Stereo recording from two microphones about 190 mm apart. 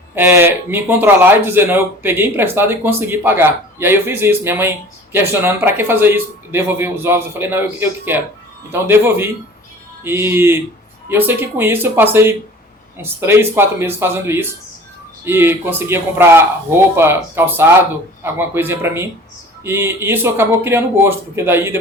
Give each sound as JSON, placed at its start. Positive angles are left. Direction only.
{"t": 0.2, "sound": "speech", "side_deg": -10}